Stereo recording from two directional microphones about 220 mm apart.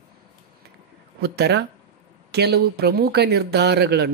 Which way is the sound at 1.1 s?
50° right (ahead or behind).